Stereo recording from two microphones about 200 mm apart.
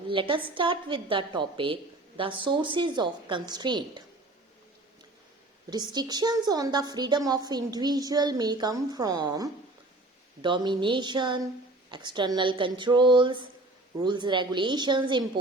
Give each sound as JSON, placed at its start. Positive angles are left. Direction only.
{"t": 0.1, "sound": "a woman's voice", "side_deg": -25}
{"t": 5.7, "sound": "a woman's voice", "side_deg": -20}